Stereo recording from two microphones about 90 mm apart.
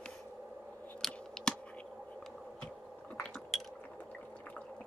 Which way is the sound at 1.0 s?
10° left (ahead or behind).